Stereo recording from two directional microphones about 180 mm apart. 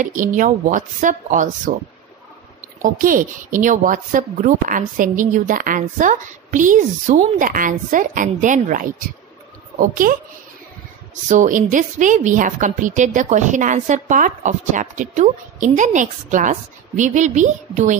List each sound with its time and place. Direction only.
0.0 s a woman's voice: 45° right (ahead or behind)
2.8 s a woman's voice: 50° right (ahead or behind)
11.2 s a woman's voice: 45° right (ahead or behind)